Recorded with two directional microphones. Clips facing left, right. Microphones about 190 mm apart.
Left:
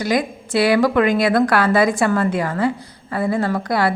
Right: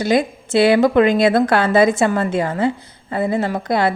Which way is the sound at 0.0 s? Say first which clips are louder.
Right 3 dB; 25° right (ahead or behind).